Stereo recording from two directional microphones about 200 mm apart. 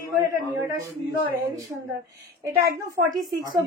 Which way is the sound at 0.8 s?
15° right (ahead or behind).